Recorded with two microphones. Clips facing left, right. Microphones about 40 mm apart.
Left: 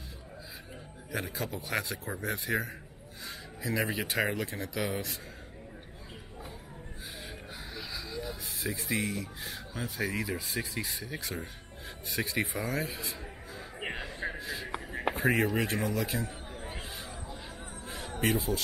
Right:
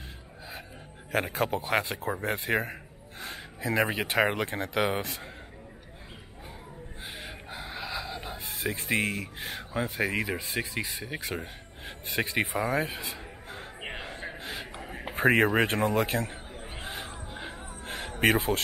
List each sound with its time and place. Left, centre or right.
1.1 s a man's voice: right
1.6 s a man's voice: right
7.2 s a sound: right
7.7 s speech: right
12.2 s a man's voice: right
12.5 s speech: centre
14.4 s a sound: right
15.1 s a man's voice: right
16.8 s a sound: right